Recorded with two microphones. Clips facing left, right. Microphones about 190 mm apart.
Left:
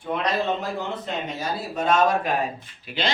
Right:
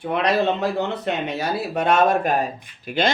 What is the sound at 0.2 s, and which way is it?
Speech, 70° right (ahead or behind).